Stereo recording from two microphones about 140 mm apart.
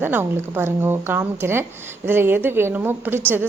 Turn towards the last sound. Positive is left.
turn(degrees=-15)  # may be behind; listen again after turning